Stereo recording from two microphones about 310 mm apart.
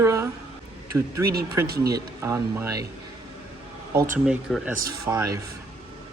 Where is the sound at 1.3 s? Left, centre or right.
Right.